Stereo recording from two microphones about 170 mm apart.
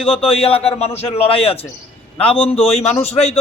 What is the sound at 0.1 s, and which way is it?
A man's voice, 35° left (ahead or behind).